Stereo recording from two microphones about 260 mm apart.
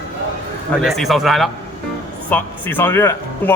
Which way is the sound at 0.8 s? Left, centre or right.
Centre.